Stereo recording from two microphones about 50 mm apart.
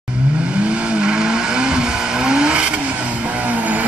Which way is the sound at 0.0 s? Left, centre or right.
Right.